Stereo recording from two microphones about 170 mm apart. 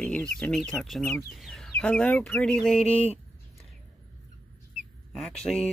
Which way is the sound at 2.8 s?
35° left (ahead or behind).